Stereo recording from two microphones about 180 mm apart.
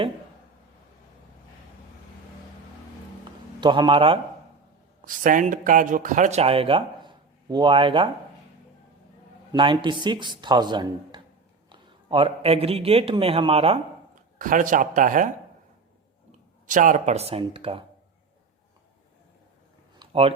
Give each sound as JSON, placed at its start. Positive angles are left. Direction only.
{"t": 3.6, "sound": "speech", "side_deg": -25}
{"t": 5.0, "sound": "speech", "side_deg": -45}
{"t": 9.5, "sound": "a man's voice", "side_deg": -25}
{"t": 14.3, "sound": "speech", "side_deg": -50}
{"t": 16.6, "sound": "speech", "side_deg": -45}
{"t": 20.0, "sound": "a sound", "side_deg": -30}